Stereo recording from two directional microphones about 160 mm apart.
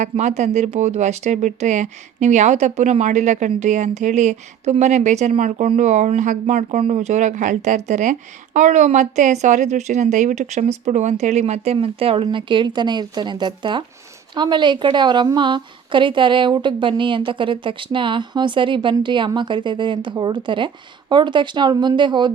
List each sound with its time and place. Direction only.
0.0 s a woman's voice: 45° right (ahead or behind); by 22.3 s 30° right (ahead or behind)